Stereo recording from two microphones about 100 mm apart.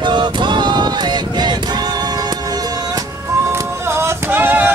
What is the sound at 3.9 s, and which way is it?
Music, 25° right (ahead or behind).